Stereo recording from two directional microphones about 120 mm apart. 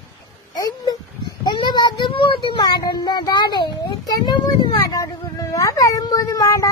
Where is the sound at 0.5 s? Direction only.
30° left (ahead or behind).